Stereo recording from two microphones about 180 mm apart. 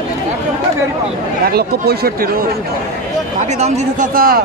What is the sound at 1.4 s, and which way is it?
Speech, 60° right (ahead or behind).